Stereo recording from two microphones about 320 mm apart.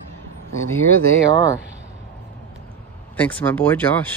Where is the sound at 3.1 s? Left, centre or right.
Centre.